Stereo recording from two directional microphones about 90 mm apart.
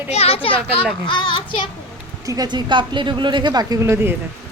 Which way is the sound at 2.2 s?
45° right (ahead or behind).